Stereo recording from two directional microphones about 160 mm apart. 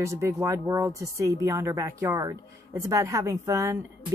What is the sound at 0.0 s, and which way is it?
A woman's voice, 20° right (ahead or behind).